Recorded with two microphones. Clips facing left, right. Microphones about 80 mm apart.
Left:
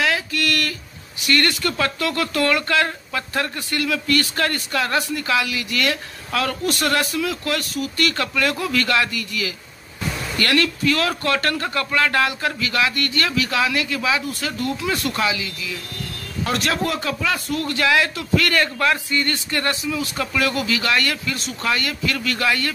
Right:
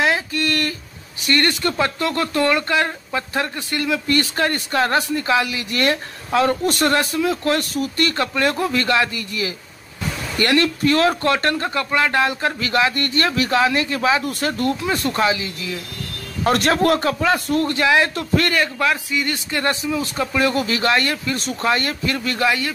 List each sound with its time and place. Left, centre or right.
0.0 s a sound: right
1.2 s speech: right
14.2 s speech: right
14.8 s speech: right
16.4 s speech: right
18.1 s speech: right
18.5 s a man's voice: centre
19.6 s speech: right
21.4 s speech: right
21.6 s speech: right